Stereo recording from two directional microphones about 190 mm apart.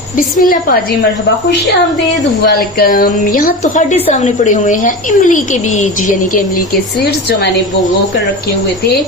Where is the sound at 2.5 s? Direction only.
50° left (ahead or behind).